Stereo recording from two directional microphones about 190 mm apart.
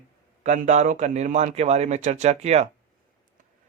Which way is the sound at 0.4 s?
40° right (ahead or behind).